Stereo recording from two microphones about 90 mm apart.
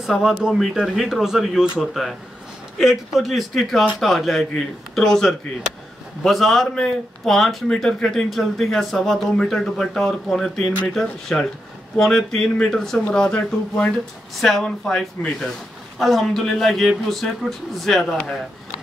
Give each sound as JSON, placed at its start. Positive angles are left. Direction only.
{"t": 0.0, "sound": "speech", "side_deg": -5}
{"t": 14.3, "sound": "speech", "side_deg": 0}